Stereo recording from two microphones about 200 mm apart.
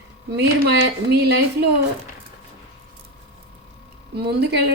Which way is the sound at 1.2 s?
55° right (ahead or behind).